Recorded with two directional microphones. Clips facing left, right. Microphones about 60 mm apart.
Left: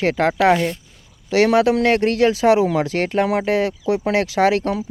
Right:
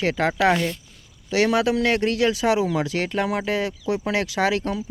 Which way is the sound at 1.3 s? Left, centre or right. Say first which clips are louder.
Left 5 dB; left.